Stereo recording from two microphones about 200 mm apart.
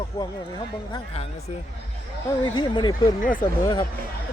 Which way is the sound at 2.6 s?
20° left (ahead or behind).